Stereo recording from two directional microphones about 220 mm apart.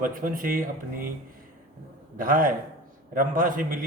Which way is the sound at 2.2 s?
40° right (ahead or behind).